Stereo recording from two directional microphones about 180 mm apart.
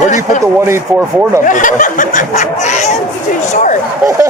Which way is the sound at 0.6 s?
15° right (ahead or behind).